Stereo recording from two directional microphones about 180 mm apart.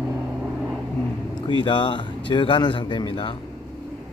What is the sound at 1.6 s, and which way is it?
A man's voice, 25° left (ahead or behind).